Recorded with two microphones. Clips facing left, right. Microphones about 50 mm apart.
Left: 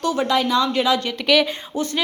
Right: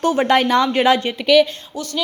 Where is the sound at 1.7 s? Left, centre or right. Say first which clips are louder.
Left 2 dB; left.